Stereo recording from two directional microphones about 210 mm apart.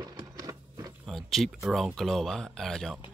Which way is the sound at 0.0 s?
15° right (ahead or behind).